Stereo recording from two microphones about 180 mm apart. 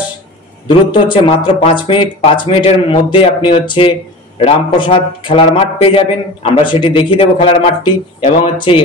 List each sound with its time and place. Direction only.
0.7 s a man's voice: 25° left (ahead or behind)